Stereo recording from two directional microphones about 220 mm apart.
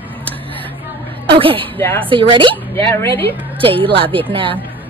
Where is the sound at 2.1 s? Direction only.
20° right (ahead or behind).